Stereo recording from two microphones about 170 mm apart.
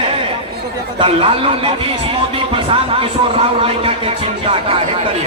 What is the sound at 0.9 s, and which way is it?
Speech, 30° right (ahead or behind).